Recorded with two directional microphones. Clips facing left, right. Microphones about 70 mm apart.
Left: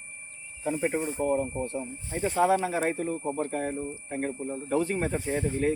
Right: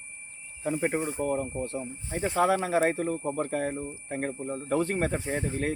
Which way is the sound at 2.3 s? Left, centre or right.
Right.